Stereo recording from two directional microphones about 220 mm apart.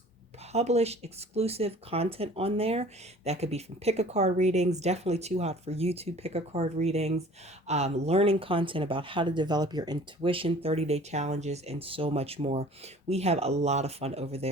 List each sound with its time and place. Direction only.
0.5 s speech: 30° right (ahead or behind)